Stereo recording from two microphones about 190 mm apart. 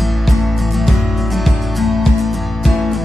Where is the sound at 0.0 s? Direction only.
Centre (ahead or behind).